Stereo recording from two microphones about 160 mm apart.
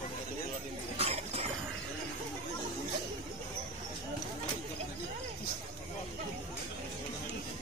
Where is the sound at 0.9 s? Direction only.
40° right (ahead or behind).